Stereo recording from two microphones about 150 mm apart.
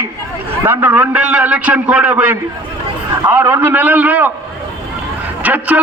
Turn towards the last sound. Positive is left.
turn(degrees=-10)  # may be behind; listen again after turning